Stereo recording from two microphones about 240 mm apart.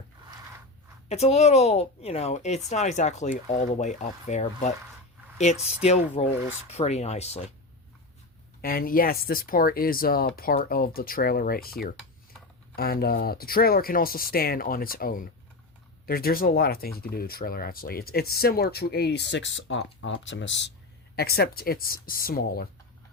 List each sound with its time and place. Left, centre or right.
1.0 s speech: left
5.8 s speech: left
8.6 s speech: left